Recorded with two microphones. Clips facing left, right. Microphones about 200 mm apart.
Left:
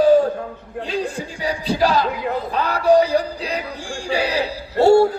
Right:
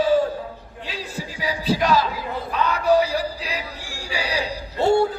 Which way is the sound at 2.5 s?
30° left (ahead or behind).